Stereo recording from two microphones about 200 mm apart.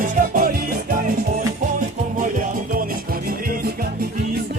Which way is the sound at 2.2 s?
45° right (ahead or behind).